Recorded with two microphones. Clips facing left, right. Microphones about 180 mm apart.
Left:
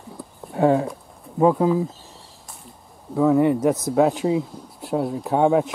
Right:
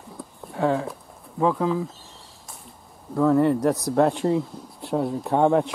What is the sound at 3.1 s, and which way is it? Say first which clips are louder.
Speech: left 2 dB; 5° left (ahead or behind).